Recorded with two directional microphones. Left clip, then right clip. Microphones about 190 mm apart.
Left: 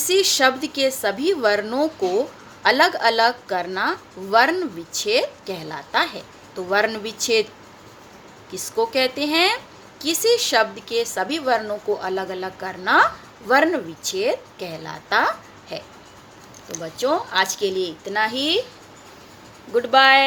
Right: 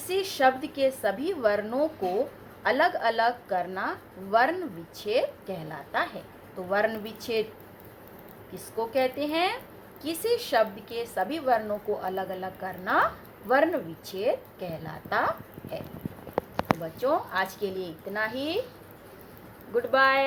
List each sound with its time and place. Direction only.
0.1 s a woman's voice: 55° left (ahead or behind)
8.5 s a woman's voice: 55° left (ahead or behind)
19.7 s a woman's voice: 50° left (ahead or behind)